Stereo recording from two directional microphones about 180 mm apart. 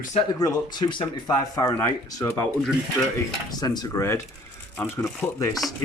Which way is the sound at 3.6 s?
20° left (ahead or behind).